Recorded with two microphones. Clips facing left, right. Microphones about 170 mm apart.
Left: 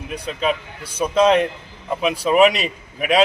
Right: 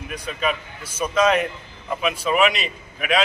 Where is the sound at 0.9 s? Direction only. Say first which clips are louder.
Left 4 dB; 30° left (ahead or behind).